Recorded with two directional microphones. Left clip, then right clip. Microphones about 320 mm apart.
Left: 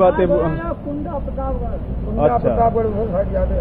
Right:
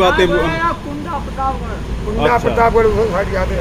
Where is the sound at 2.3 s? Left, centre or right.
Right.